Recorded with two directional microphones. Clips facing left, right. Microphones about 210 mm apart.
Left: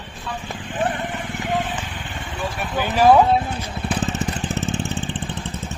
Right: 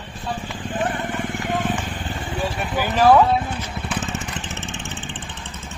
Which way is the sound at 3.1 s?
25° left (ahead or behind).